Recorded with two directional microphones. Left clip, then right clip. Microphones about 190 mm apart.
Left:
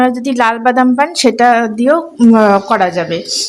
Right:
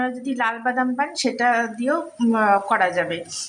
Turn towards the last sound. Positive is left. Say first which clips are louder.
# left 7 dB
turn(degrees=45)  # may be behind; listen again after turning